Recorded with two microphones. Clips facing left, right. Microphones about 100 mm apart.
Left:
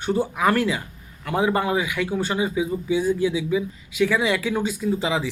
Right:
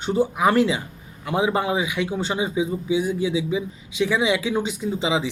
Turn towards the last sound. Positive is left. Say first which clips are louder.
# even
turn(degrees=-15)  # may be behind; listen again after turning